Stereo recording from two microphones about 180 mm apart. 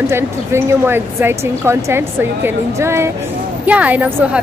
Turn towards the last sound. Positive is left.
turn(degrees=-10)  # may be behind; listen again after turning